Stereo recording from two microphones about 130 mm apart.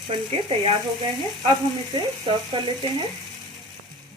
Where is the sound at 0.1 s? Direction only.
45° right (ahead or behind).